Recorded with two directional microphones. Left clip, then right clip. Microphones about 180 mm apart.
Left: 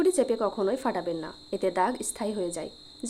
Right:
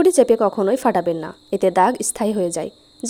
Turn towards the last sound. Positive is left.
turn(degrees=-40)  # may be behind; listen again after turning